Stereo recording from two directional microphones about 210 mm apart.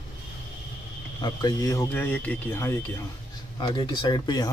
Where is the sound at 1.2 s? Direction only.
15° left (ahead or behind).